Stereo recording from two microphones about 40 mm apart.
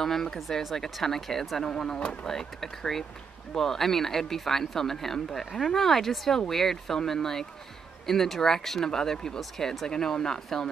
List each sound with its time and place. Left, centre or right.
0.0 s speech: centre
1.6 s speech: centre
2.2 s speech: centre